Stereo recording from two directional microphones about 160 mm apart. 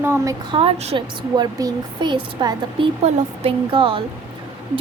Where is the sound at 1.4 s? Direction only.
25° right (ahead or behind).